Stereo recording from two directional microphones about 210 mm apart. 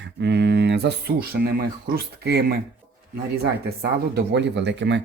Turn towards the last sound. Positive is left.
turn(degrees=-55)  # may be behind; listen again after turning